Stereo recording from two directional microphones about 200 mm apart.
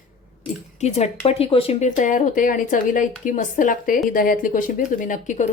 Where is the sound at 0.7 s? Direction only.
35° left (ahead or behind).